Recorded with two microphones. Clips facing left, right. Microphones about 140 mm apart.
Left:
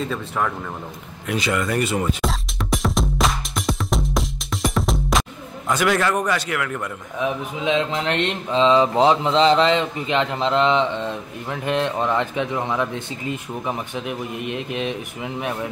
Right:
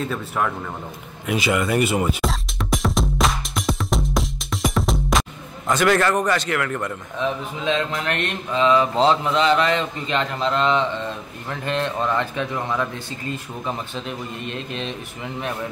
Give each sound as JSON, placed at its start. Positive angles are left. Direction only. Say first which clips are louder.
{"t": 0.0, "sound": "speech", "louder": "even", "side_deg": -5}
{"t": 1.2, "sound": "music", "louder": "right 1 dB", "side_deg": -5}
{"t": 5.7, "sound": "a man's voice", "louder": "right 2 dB", "side_deg": 10}
{"t": 9.3, "sound": "a man's voice", "louder": "left 3 dB", "side_deg": 25}